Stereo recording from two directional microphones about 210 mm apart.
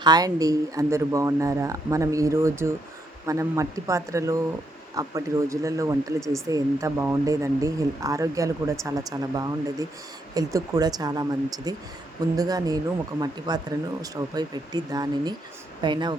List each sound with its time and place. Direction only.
0.0 s speech: 20° right (ahead or behind)